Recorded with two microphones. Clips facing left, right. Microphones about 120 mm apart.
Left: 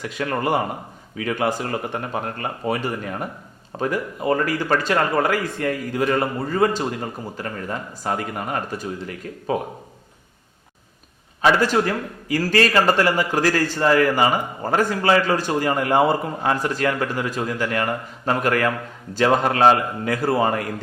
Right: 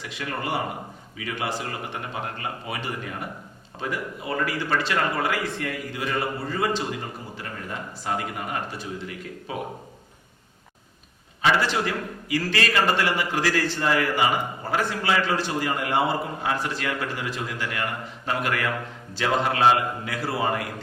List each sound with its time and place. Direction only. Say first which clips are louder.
0.0 s a man's voice: left 7 dB; 45° left (ahead or behind)
11.4 s a man's voice: left 5 dB; 45° left (ahead or behind)